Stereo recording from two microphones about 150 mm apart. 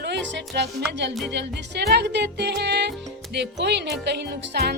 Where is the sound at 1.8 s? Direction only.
90° right.